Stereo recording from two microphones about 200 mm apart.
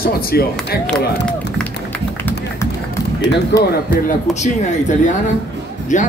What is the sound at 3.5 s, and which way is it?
Speech, 55° left (ahead or behind).